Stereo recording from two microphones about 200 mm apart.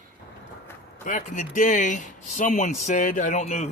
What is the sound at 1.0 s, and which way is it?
Speech, 40° left (ahead or behind).